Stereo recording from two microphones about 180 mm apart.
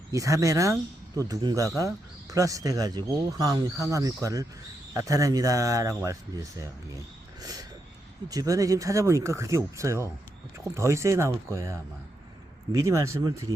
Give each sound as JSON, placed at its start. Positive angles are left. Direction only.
{"t": 0.1, "sound": "speech", "side_deg": -20}
{"t": 7.4, "sound": "a sound", "side_deg": -20}
{"t": 8.3, "sound": "speech", "side_deg": -20}